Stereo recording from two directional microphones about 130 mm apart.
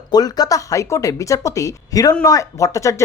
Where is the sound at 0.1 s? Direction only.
30° left (ahead or behind).